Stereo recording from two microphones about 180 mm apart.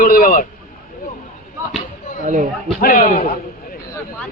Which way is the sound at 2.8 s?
50° left (ahead or behind).